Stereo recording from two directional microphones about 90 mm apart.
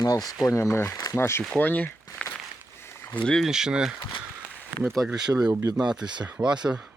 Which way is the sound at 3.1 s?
10° left (ahead or behind).